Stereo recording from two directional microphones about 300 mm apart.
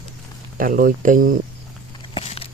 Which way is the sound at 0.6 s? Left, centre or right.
Right.